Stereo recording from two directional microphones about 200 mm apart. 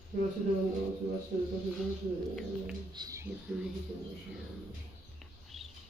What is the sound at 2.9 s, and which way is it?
Speech, 15° right (ahead or behind).